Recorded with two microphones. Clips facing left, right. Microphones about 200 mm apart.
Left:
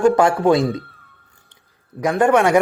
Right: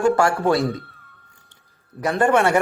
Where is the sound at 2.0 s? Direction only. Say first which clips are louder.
Left 3 dB; 15° left (ahead or behind).